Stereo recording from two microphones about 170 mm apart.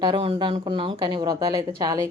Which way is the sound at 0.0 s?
30° right (ahead or behind).